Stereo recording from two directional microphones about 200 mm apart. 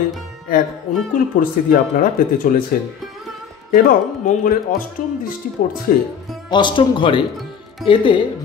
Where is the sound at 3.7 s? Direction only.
45° left (ahead or behind).